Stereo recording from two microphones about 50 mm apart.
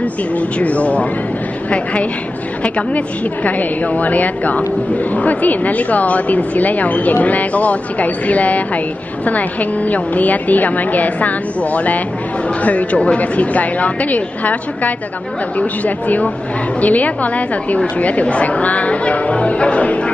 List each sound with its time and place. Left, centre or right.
0.6 s a woman's voice: left
3.4 s a woman's voice: left